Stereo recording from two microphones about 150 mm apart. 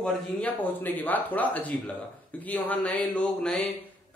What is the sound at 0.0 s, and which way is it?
A man's voice, 10° left (ahead or behind).